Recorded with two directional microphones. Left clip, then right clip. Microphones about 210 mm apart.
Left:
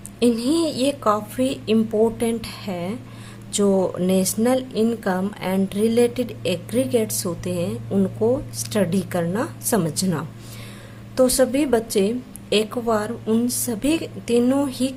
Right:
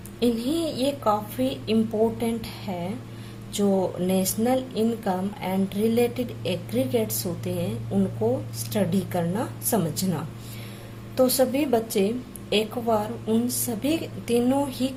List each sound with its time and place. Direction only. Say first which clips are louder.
0.2 s speech: left 5 dB; 25° left (ahead or behind)